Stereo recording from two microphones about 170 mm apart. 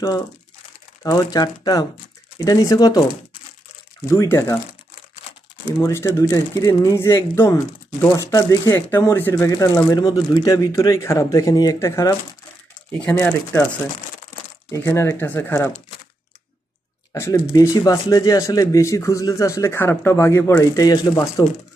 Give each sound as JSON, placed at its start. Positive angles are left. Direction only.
{"t": 1.0, "sound": "speech", "side_deg": 20}
{"t": 4.1, "sound": "speech", "side_deg": 15}
{"t": 5.6, "sound": "speech", "side_deg": 15}
{"t": 14.7, "sound": "speech", "side_deg": 15}
{"t": 17.1, "sound": "speech", "side_deg": 15}